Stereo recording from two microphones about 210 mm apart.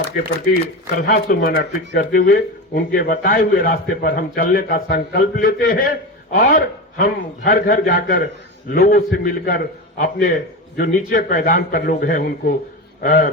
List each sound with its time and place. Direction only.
1.0 s a man's voice: 45° left (ahead or behind)